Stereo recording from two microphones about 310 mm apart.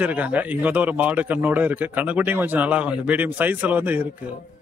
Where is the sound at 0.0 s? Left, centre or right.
Centre.